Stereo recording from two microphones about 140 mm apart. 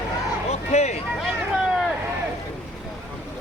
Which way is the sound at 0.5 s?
50° left (ahead or behind).